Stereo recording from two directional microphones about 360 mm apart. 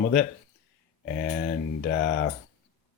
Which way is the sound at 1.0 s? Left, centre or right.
Left.